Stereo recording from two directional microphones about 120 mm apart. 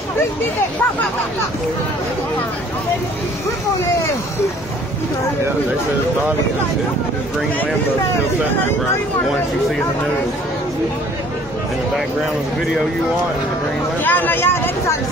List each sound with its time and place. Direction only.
14.0 s speech: 15° left (ahead or behind)